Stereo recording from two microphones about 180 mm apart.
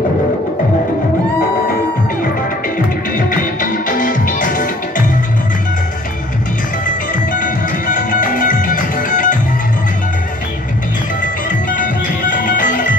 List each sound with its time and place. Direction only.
4.0 s music: 45° left (ahead or behind)
7.3 s music: 45° left (ahead or behind)
11.7 s music: 45° left (ahead or behind)